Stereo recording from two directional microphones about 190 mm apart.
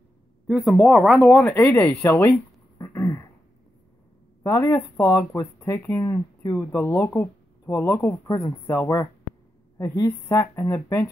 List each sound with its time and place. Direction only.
0.5 s speech: centre (ahead or behind)
1.5 s speech: 10° left (ahead or behind)
2.8 s a sound: 15° left (ahead or behind)
4.4 s speech: 15° left (ahead or behind)